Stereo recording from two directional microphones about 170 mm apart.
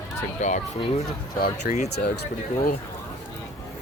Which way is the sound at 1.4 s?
55° left (ahead or behind).